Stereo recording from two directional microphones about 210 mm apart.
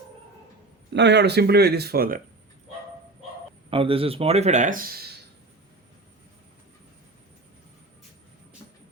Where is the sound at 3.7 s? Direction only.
25° right (ahead or behind).